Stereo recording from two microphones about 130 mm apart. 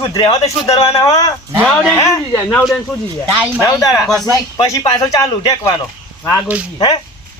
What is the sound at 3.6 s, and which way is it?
Speech, 25° left (ahead or behind).